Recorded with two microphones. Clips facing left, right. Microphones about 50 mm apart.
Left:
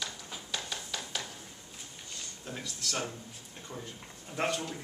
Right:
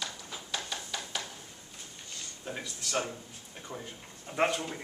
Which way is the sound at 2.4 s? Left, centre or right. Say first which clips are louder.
Right 1 dB; centre.